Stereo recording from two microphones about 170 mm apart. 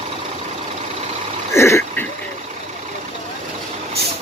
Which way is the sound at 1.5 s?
15° left (ahead or behind).